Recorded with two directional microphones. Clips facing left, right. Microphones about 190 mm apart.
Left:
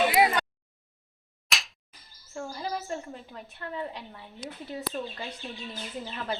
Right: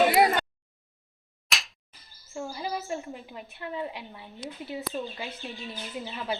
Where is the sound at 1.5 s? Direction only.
Centre (ahead or behind).